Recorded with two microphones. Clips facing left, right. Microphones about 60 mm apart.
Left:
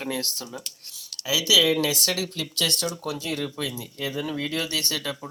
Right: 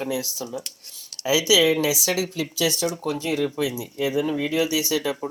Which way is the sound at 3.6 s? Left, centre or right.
Centre.